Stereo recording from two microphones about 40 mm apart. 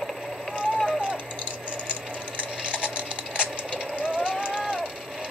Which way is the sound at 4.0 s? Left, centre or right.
Right.